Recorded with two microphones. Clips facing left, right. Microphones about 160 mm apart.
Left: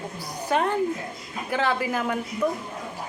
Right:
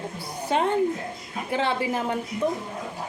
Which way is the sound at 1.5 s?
25° right (ahead or behind).